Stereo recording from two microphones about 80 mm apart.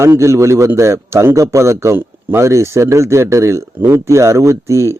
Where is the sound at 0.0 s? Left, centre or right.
Right.